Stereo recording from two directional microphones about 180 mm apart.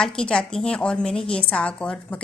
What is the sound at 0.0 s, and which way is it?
A woman's voice, 5° left (ahead or behind).